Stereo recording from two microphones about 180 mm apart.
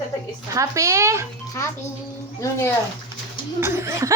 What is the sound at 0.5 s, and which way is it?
Speech, 15° right (ahead or behind).